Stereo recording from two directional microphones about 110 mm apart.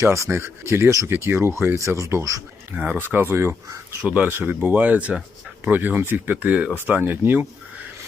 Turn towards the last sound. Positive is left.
turn(degrees=-15)  # may be behind; listen again after turning